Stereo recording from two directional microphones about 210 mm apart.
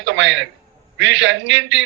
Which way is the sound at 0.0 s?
60° right (ahead or behind).